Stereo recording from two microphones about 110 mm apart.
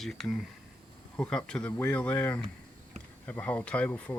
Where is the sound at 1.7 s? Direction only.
25° left (ahead or behind).